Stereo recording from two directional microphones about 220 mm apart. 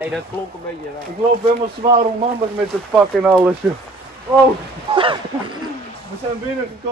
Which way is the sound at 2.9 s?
10° right (ahead or behind).